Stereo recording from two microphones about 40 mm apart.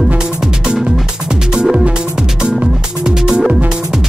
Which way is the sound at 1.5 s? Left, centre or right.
Centre.